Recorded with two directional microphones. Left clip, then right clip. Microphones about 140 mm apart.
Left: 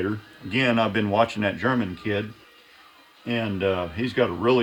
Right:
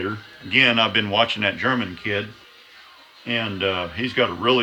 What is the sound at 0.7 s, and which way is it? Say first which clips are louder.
Speech: right 3 dB; 70° left (ahead or behind).